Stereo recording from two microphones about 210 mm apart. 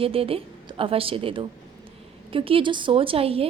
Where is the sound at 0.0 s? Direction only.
25° right (ahead or behind).